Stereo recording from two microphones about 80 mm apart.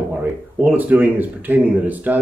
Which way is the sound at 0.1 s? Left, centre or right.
Right.